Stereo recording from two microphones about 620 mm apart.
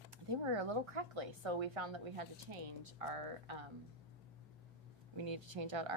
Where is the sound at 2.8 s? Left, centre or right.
Right.